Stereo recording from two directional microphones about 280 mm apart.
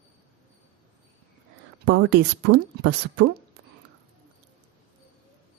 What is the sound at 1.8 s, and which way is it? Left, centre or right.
A woman's voice, right.